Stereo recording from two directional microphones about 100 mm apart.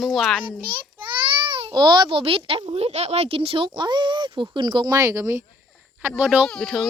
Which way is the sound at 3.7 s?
50° right (ahead or behind).